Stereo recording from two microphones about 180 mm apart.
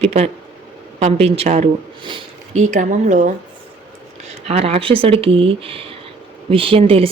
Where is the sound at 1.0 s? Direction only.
35° right (ahead or behind).